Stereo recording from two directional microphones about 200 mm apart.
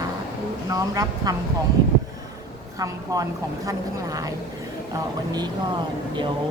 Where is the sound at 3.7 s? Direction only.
15° right (ahead or behind).